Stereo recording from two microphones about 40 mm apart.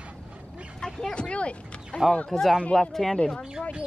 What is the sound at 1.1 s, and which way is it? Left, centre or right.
Speech, left.